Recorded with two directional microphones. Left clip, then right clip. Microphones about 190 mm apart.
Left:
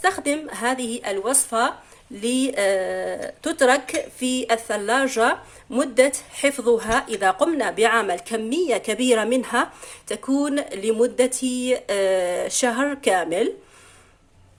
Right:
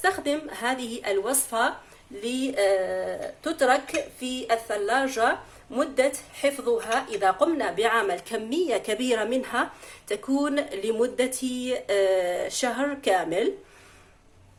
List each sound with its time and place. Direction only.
0.0 s a woman's voice: 30° left (ahead or behind)